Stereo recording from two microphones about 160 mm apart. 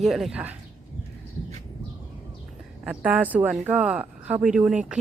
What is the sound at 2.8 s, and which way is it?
Speech, 5° right (ahead or behind).